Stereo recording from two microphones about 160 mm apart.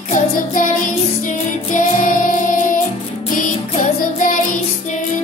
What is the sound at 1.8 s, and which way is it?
Music, 55° left (ahead or behind).